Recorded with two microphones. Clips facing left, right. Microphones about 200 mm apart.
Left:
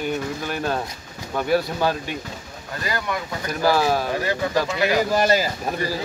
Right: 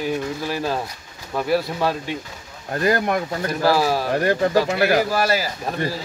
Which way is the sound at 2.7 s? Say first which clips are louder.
Right 7 dB; 50° right (ahead or behind).